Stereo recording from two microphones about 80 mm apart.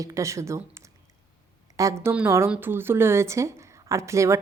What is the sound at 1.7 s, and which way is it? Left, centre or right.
Speech, right.